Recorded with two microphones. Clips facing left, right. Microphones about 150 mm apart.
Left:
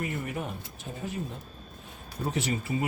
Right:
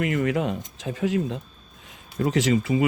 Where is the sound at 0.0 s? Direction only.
90° right.